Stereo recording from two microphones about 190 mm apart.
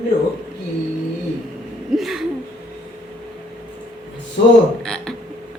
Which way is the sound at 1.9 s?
Centre (ahead or behind).